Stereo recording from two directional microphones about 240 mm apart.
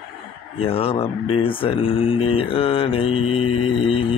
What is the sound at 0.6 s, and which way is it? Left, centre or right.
Speech, left.